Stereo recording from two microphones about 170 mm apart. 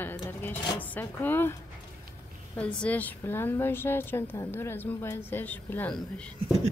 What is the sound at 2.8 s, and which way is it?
A woman's voice, 10° left (ahead or behind).